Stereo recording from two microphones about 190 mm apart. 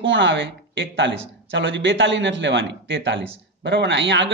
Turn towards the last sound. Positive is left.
turn(degrees=-70)  # may be behind; listen again after turning